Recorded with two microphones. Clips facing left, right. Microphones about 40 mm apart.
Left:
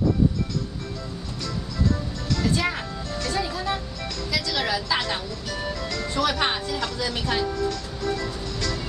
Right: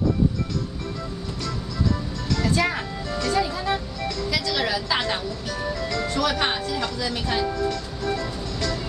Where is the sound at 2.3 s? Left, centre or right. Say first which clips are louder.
Right 2 dB; centre.